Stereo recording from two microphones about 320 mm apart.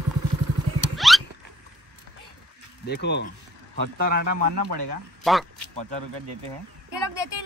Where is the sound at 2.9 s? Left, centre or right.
Left.